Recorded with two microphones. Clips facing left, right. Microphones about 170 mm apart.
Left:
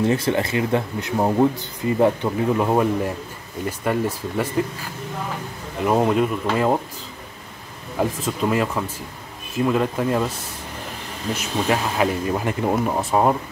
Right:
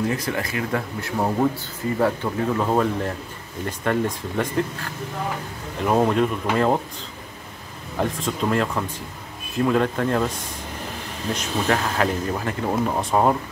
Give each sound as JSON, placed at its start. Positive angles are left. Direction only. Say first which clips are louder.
{"t": 0.0, "sound": "speech", "louder": "left 5 dB", "side_deg": 25}
{"t": 5.9, "sound": "speech", "louder": "left 1 dB", "side_deg": 5}
{"t": 8.0, "sound": "speech", "louder": "left 2 dB", "side_deg": 5}
{"t": 11.3, "sound": "speech", "louder": "left 1 dB", "side_deg": 10}